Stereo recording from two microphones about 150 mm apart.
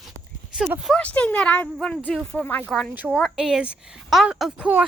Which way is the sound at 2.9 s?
10° right (ahead or behind).